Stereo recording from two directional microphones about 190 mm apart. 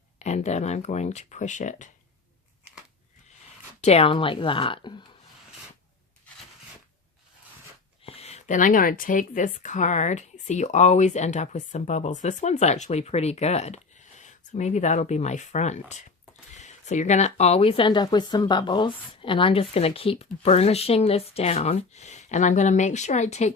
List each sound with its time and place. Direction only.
0.2 s a woman's voice: 35° left (ahead or behind)
3.8 s a woman's voice: 35° left (ahead or behind)
8.0 s a woman's voice: 30° left (ahead or behind)